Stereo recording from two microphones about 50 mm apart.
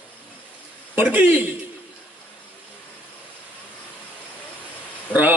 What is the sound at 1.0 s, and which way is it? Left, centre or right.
Speech, right.